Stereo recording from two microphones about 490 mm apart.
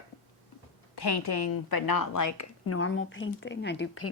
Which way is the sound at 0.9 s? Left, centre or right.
Left.